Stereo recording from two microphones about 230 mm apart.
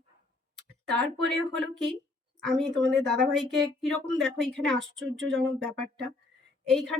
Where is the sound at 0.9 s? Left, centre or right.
Centre.